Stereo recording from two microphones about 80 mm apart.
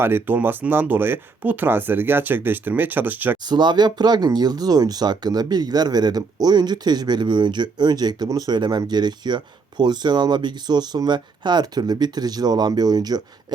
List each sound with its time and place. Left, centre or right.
0.0 s speech: right
3.4 s speech: right